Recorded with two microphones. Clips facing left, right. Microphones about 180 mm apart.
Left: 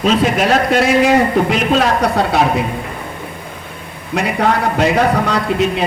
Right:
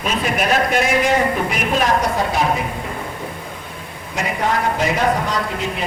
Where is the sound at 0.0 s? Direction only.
90° left; by 2.5 s 70° left (ahead or behind).